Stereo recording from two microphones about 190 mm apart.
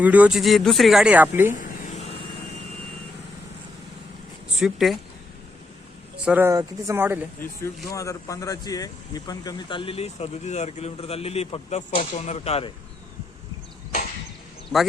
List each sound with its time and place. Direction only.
0.0 s speech: 10° right (ahead or behind)
4.6 s speech: centre (ahead or behind)
6.2 s speech: 10° right (ahead or behind)
7.9 s speech: 15° left (ahead or behind); by 12.7 s 30° left (ahead or behind)